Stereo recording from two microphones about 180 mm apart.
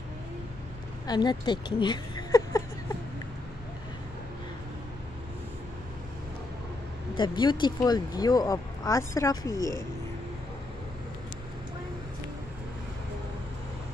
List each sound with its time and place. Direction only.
1.0 s speech: 25° left (ahead or behind)
7.2 s speech: 25° left (ahead or behind)